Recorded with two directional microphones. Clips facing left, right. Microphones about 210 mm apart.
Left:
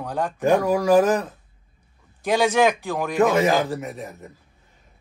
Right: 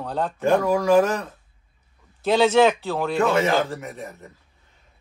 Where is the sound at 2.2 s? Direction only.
10° left (ahead or behind).